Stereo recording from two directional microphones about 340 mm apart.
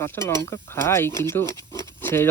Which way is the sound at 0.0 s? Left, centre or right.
Centre.